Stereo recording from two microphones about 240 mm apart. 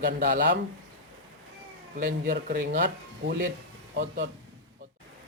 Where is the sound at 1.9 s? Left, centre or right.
Right.